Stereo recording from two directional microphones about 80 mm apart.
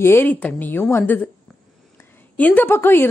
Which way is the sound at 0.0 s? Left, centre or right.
Left.